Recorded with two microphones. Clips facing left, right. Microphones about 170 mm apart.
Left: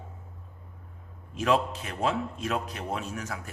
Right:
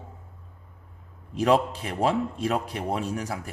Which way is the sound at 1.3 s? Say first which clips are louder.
Right 4 dB; 35° right (ahead or behind).